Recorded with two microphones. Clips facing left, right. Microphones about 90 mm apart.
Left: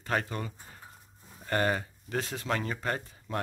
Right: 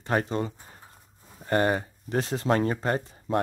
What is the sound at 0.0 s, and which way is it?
Speech, 25° right (ahead or behind).